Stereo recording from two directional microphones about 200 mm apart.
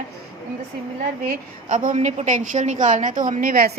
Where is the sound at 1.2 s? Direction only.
40° right (ahead or behind).